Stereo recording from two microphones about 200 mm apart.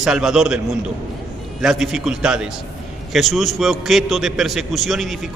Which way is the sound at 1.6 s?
Centre (ahead or behind).